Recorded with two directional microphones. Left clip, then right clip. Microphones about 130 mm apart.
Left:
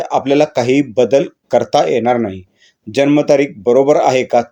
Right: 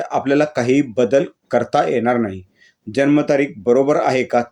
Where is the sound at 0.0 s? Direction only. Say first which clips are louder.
Left 4 dB; 30° left (ahead or behind).